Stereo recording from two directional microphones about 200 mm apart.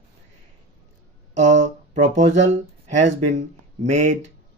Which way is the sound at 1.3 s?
35° right (ahead or behind).